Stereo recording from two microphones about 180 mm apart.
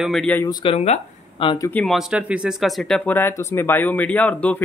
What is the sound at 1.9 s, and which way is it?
Speech, 5° right (ahead or behind).